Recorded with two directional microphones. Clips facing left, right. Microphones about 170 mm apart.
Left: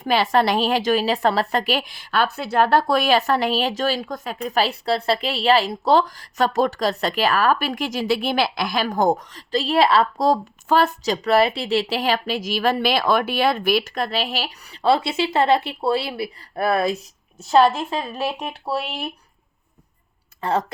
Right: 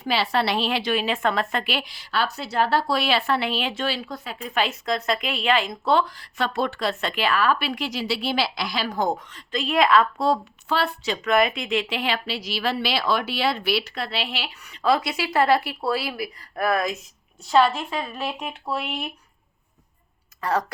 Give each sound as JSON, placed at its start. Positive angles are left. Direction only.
{"t": 0.0, "sound": "a woman's voice", "side_deg": 50}
{"t": 20.4, "sound": "speech", "side_deg": 25}